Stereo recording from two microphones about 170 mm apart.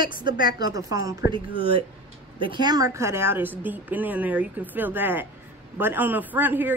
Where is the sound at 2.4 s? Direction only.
25° right (ahead or behind).